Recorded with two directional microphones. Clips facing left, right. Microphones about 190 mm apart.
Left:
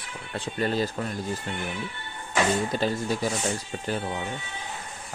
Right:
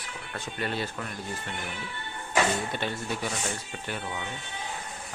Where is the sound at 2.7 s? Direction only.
40° left (ahead or behind).